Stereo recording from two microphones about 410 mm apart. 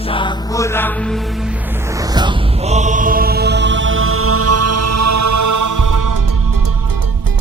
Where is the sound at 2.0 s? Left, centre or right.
Centre; by 6.1 s right.